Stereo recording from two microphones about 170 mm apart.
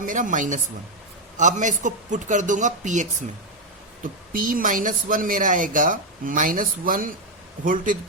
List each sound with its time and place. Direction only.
0.0 s a woman's voice: 50° right (ahead or behind)